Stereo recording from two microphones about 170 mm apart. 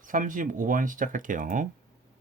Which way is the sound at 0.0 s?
50° right (ahead or behind).